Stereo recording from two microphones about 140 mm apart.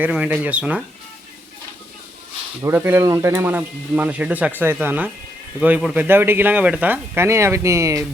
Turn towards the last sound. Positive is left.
turn(degrees=-20)  # may be behind; listen again after turning